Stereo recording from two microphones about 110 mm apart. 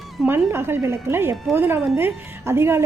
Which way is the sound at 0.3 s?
20° right (ahead or behind).